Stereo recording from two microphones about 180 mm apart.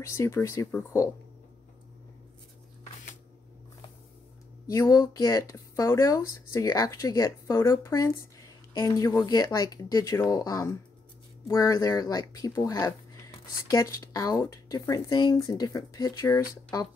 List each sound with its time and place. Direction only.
0.0 s speech: 15° left (ahead or behind)
4.6 s speech: 20° left (ahead or behind)